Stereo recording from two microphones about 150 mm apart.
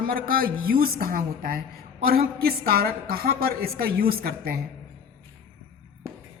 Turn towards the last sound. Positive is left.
turn(degrees=-80)